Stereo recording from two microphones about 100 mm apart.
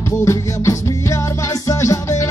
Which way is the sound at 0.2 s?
30° left (ahead or behind).